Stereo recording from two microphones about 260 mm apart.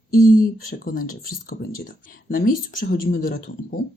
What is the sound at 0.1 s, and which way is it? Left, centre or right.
Speech, left.